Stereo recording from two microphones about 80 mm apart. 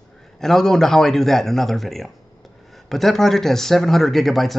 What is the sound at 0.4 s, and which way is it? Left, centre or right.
Speech, centre.